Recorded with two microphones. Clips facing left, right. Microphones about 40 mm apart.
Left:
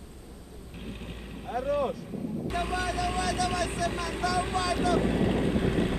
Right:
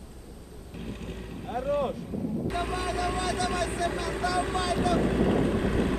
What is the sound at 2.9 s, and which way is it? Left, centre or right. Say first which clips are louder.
Vehicle: even; right.